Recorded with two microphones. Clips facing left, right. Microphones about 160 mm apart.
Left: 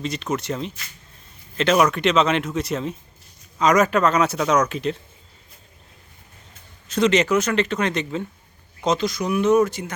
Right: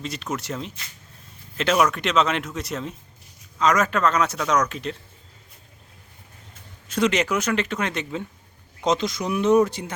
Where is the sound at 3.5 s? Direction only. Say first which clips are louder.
Left 4 dB; 15° left (ahead or behind).